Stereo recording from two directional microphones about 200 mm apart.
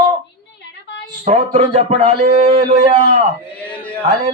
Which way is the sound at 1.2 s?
35° right (ahead or behind).